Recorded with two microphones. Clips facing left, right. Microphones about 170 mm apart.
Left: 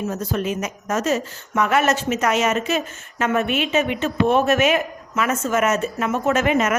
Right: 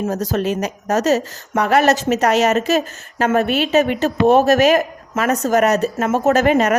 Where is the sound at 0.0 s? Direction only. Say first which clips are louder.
Right 4 dB; 40° right (ahead or behind).